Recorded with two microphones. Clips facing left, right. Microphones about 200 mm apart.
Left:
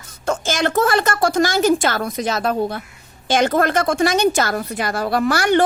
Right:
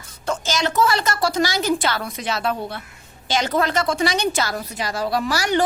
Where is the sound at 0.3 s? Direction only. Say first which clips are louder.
Left 3 dB; 50° left (ahead or behind).